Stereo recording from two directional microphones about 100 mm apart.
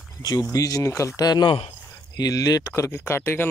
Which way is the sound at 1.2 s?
40° left (ahead or behind).